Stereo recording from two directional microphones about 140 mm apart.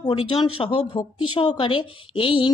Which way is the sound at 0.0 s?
40° left (ahead or behind).